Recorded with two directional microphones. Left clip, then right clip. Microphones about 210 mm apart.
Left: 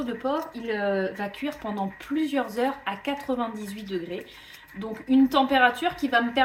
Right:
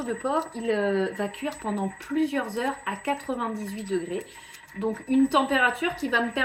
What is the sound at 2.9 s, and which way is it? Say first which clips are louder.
Speech: even; 20° left (ahead or behind).